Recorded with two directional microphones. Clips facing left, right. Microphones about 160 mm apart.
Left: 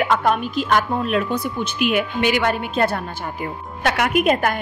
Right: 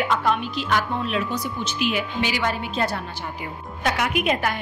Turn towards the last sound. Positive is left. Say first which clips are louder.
# left 5 dB
turn(degrees=50)  # may be behind; listen again after turning